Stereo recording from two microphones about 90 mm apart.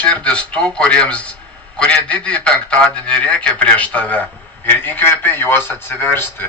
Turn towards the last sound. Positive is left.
turn(degrees=25)  # may be behind; listen again after turning